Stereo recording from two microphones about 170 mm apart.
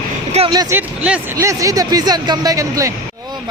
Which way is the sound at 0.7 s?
5° right (ahead or behind).